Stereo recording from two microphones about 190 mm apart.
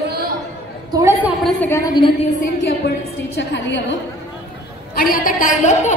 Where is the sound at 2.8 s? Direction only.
60° left (ahead or behind).